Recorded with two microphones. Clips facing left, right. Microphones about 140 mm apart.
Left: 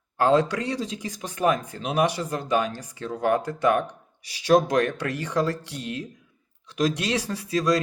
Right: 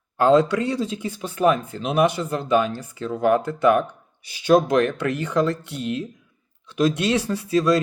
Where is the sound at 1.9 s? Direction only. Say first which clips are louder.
Right 4 dB; 35° left (ahead or behind).